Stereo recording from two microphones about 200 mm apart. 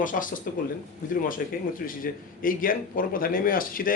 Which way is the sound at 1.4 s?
50° left (ahead or behind).